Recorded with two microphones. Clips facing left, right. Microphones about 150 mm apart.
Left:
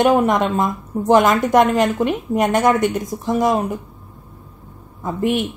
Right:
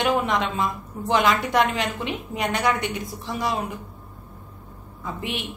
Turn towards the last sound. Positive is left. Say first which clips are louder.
# left 11 dB
turn(degrees=45)  # may be behind; listen again after turning